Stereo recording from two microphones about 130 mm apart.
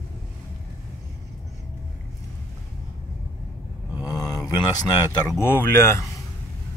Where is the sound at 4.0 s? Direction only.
30° left (ahead or behind).